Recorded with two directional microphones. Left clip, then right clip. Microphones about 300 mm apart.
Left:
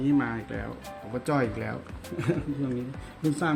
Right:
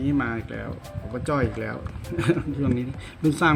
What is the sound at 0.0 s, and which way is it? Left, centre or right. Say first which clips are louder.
Speech: right 1 dB; centre.